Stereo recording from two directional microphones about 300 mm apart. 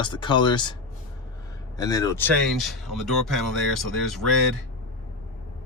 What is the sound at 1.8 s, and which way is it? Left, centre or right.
Speech, centre.